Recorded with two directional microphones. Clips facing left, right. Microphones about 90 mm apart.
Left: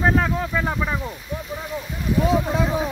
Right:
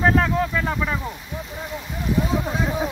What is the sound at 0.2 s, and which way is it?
Speech, 15° left (ahead or behind).